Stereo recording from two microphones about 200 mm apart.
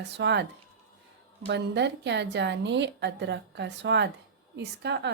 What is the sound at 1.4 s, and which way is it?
Speech, 60° right (ahead or behind).